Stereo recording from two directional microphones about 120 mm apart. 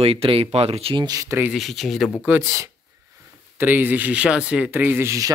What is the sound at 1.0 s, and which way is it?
Speech, 30° right (ahead or behind).